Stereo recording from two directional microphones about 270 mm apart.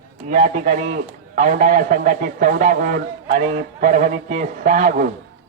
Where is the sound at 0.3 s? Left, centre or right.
Right.